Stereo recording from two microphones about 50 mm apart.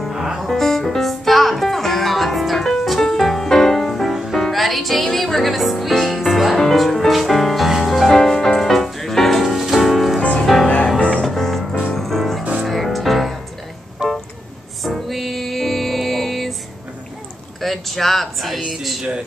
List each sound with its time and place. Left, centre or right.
0.1 s music: centre
0.4 s music: centre
8.1 s music: centre
11.0 s music: left
11.2 s music: centre
14.0 s music: centre
14.8 s music: centre
17.6 s a sound: centre